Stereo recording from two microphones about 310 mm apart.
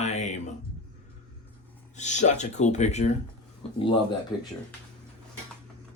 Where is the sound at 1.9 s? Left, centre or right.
Left.